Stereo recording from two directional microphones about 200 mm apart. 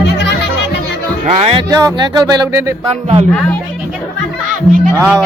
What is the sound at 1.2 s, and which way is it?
Speech, 30° right (ahead or behind).